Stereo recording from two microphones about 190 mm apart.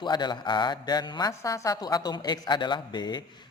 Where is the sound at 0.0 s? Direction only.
25° left (ahead or behind).